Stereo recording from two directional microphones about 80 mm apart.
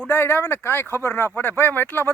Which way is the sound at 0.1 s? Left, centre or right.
Left.